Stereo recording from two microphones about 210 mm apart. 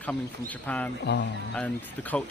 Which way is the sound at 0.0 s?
5° left (ahead or behind).